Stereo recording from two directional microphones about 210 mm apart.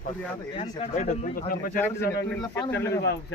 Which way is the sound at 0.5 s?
30° left (ahead or behind).